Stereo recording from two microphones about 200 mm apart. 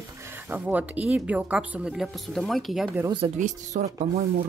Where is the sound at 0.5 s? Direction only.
10° right (ahead or behind).